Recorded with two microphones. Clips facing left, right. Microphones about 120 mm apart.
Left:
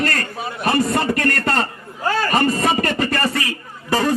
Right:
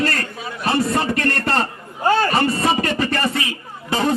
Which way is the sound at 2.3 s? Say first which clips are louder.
Left 1 dB; 45° left (ahead or behind).